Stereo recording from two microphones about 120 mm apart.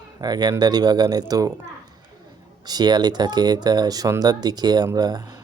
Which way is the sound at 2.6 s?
35° right (ahead or behind).